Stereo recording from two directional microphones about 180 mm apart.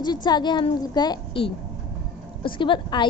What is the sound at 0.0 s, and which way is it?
A woman's voice, 25° left (ahead or behind).